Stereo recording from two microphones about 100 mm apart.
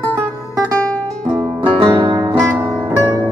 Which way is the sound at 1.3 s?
40° right (ahead or behind).